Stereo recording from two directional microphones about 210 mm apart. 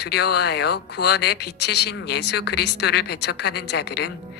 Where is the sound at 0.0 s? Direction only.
50° left (ahead or behind).